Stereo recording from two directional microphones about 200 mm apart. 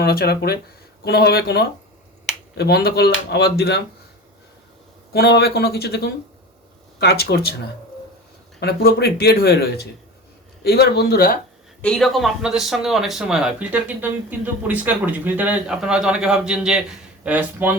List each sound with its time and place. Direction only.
0.0 s speech: 50° left (ahead or behind)
5.1 s speech: 55° left (ahead or behind)
11.8 s speech: 5° left (ahead or behind)